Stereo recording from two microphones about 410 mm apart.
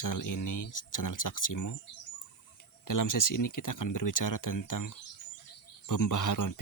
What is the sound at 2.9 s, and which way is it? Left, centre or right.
Speech, left.